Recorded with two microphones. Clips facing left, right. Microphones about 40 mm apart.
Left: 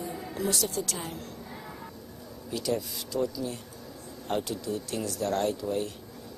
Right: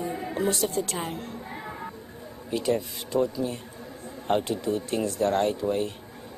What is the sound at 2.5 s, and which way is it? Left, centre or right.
Speech, right.